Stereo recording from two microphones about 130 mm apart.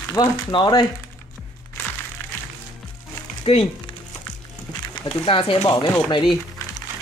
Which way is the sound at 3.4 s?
45° left (ahead or behind).